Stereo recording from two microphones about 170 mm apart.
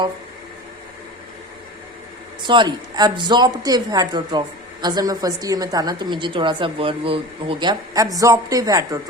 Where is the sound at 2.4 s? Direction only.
25° right (ahead or behind).